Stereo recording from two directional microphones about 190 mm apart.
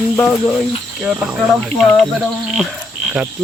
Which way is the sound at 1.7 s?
5° left (ahead or behind).